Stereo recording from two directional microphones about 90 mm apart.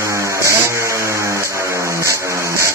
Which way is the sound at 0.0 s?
35° right (ahead or behind).